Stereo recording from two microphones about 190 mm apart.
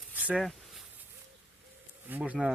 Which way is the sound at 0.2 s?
5° right (ahead or behind).